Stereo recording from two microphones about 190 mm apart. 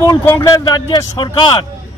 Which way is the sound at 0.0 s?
15° left (ahead or behind).